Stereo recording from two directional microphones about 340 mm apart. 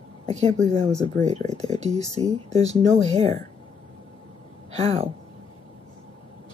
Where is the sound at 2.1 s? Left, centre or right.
Centre.